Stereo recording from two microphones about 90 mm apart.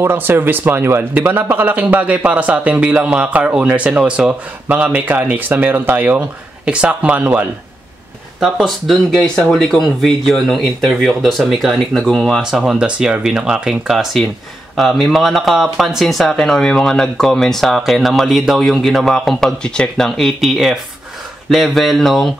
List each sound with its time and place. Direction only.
0.0 s speech: 25° right (ahead or behind)
8.4 s speech: centre (ahead or behind)